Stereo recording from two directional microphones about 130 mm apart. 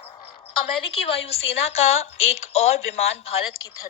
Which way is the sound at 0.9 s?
50° left (ahead or behind).